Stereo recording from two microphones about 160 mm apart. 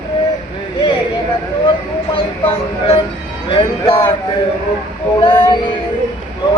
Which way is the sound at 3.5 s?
35° left (ahead or behind).